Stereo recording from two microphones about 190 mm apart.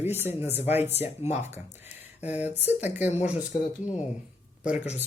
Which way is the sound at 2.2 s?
10° right (ahead or behind).